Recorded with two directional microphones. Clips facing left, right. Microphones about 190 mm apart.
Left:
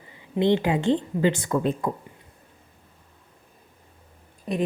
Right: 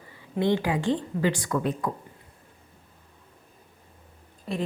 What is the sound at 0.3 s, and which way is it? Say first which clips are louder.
Speech: left 3 dB; 25° left (ahead or behind).